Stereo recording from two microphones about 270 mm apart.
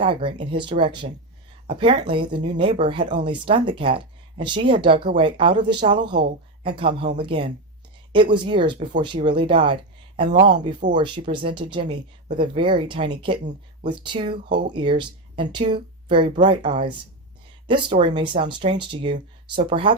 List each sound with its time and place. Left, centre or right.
0.0 s a woman's voice: centre